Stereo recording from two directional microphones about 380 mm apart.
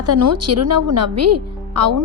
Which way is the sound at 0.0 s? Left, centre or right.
Right.